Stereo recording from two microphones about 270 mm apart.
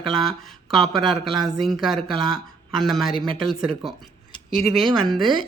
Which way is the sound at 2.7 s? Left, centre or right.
Centre.